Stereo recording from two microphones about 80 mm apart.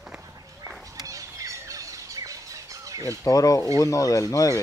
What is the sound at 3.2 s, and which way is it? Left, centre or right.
Speech, left.